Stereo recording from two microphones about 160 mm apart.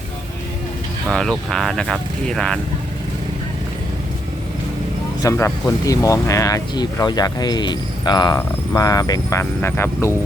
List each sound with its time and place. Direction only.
1.1 s speech: centre (ahead or behind)
5.2 s speech: 20° left (ahead or behind)